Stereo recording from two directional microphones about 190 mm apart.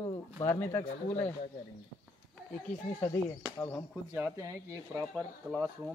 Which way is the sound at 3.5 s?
10° left (ahead or behind).